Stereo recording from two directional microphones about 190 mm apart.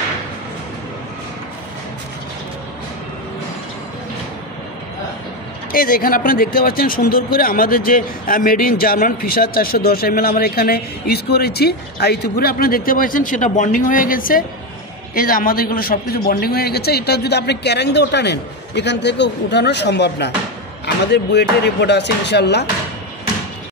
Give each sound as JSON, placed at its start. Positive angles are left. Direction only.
{"t": 5.7, "sound": "speech", "side_deg": 50}